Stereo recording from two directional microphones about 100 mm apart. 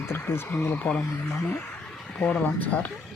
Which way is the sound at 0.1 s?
25° left (ahead or behind).